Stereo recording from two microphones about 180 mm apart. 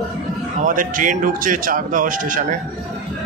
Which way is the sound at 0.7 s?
45° right (ahead or behind).